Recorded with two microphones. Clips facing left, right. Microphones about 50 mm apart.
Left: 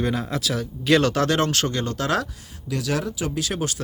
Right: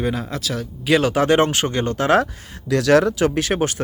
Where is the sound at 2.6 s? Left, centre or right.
Right.